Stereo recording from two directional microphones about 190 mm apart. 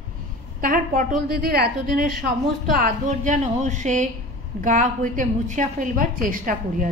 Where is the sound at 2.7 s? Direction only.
45° right (ahead or behind).